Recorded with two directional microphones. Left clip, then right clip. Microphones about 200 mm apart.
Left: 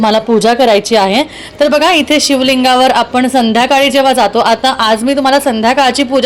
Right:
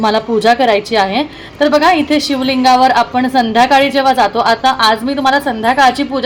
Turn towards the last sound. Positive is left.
turn(degrees=30)  # may be behind; listen again after turning